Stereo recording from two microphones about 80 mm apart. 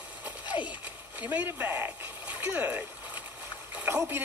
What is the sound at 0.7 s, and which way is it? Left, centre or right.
Splash, centre.